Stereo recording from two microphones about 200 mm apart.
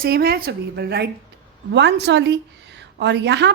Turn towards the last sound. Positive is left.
turn(degrees=-60)  # may be behind; listen again after turning